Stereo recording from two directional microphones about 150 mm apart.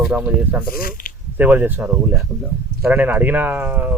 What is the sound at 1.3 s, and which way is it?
Speech, 10° right (ahead or behind).